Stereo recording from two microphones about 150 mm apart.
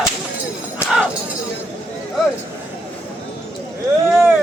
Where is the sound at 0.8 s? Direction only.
5° right (ahead or behind).